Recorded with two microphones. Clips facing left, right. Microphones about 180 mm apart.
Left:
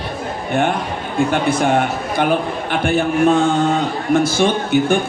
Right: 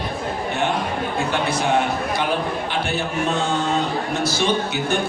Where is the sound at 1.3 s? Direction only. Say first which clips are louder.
Left 4 dB; 50° left (ahead or behind).